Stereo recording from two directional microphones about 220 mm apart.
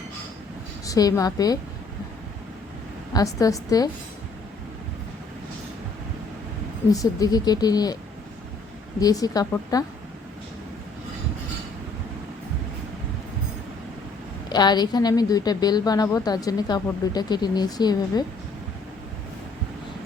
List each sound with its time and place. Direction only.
0.9 s a woman's voice: 15° left (ahead or behind)
3.1 s a woman's voice: 15° left (ahead or behind)
6.9 s a woman's voice: 15° left (ahead or behind)
9.0 s a woman's voice: 15° left (ahead or behind)
14.5 s a woman's voice: 20° left (ahead or behind)